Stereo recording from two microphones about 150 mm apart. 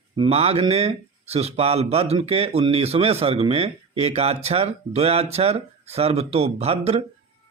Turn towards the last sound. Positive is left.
turn(degrees=-40)  # may be behind; listen again after turning